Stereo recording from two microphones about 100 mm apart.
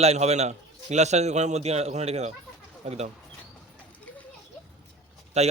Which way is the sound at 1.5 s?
90° right.